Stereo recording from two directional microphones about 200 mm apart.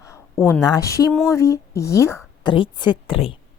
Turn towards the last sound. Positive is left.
turn(degrees=25)  # may be behind; listen again after turning